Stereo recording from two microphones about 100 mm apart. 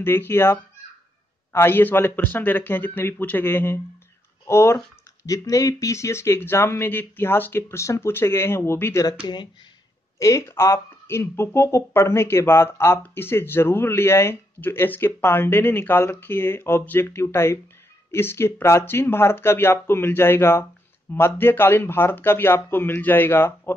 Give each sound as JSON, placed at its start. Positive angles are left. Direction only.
{"t": 0.0, "sound": "speech", "side_deg": 25}
{"t": 10.1, "sound": "speech", "side_deg": 30}